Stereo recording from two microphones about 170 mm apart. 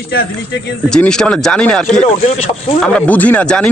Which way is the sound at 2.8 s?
10° left (ahead or behind).